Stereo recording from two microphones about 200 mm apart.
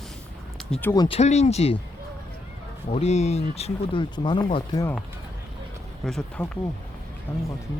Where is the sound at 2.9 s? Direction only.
35° left (ahead or behind).